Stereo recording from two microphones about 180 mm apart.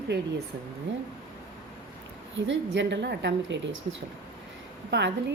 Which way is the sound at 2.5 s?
80° right.